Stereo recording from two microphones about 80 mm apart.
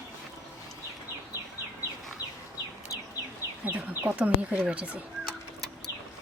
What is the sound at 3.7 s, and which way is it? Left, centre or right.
Bird, centre.